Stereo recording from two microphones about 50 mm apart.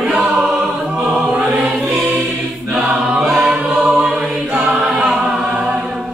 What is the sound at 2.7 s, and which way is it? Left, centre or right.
Choir, centre.